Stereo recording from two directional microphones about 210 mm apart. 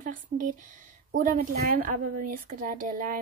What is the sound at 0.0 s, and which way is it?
Speech, 40° right (ahead or behind).